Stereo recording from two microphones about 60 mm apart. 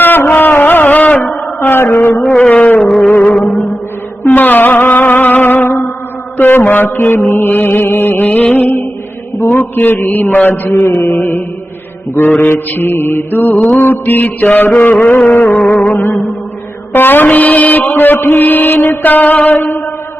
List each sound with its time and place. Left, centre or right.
0.0 s a sound: left
1.6 s a sound: left
2.2 s mantra: centre
2.5 s a sound: left
3.1 s music: left
6.3 s mantra: left
9.5 s mantra: left
15.6 s music: left
16.9 s speech: left
18.3 s mantra: left